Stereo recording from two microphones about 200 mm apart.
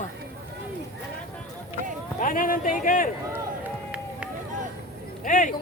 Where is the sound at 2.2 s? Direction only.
45° left (ahead or behind).